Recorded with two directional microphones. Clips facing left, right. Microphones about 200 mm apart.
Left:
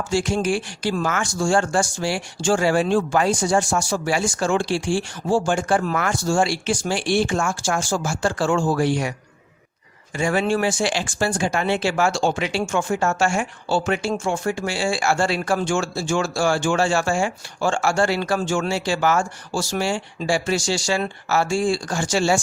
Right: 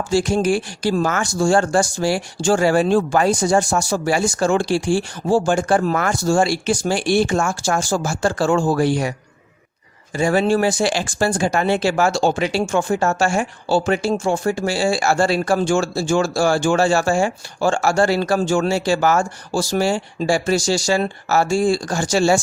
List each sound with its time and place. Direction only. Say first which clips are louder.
0.1 s speech: right 4 dB; 40° right (ahead or behind)
10.2 s speech: right 4 dB; 35° right (ahead or behind)